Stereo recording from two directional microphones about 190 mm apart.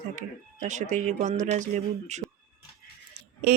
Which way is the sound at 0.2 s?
40° right (ahead or behind).